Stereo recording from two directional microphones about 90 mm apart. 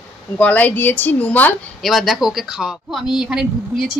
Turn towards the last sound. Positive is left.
turn(degrees=-5)  # may be behind; listen again after turning